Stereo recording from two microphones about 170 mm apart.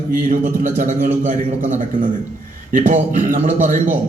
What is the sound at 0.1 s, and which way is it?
A man's voice, 55° right (ahead or behind).